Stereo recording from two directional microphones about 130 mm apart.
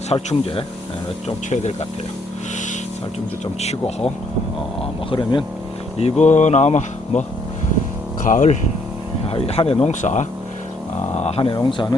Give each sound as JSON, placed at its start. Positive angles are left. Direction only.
{"t": 0.1, "sound": "speech", "side_deg": 50}
{"t": 3.4, "sound": "speech", "side_deg": 55}
{"t": 5.1, "sound": "speech", "side_deg": 40}
{"t": 6.0, "sound": "speech", "side_deg": 55}
{"t": 8.2, "sound": "speech", "side_deg": 80}
{"t": 9.2, "sound": "speech", "side_deg": 50}
{"t": 9.9, "sound": "speech", "side_deg": 70}
{"t": 11.2, "sound": "speech", "side_deg": 50}
{"t": 11.5, "sound": "speech", "side_deg": 35}